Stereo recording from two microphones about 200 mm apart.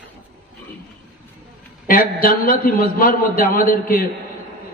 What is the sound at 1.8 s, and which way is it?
A man's voice, 45° left (ahead or behind).